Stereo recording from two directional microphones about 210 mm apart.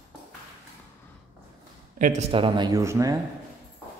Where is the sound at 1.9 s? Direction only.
35° right (ahead or behind).